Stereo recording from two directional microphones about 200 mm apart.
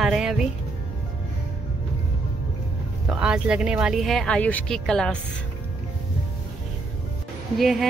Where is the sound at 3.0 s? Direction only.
5° right (ahead or behind).